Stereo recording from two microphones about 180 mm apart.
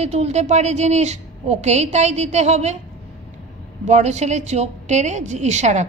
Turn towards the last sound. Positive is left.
turn(degrees=-40)  # may be behind; listen again after turning